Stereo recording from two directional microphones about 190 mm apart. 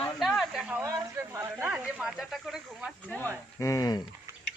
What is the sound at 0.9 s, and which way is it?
Speech, 15° right (ahead or behind).